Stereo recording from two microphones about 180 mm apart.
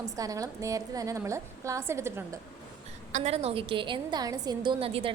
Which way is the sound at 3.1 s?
35° right (ahead or behind).